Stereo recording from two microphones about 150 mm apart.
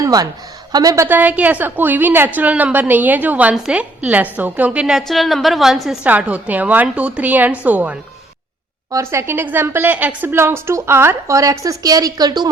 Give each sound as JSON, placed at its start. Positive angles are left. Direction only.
{"t": 0.0, "sound": "a woman's voice", "side_deg": -25}
{"t": 1.0, "sound": "a woman's voice", "side_deg": -10}